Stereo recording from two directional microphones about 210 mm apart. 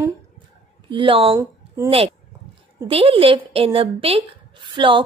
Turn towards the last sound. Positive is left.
turn(degrees=-25)  # may be behind; listen again after turning